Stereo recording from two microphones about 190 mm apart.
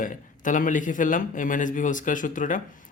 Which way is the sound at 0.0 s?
45° left (ahead or behind).